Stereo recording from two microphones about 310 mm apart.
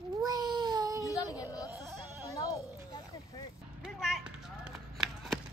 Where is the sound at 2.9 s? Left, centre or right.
Centre.